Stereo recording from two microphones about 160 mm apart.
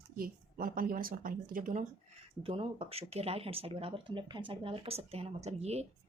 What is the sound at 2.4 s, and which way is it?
Speech, 35° right (ahead or behind).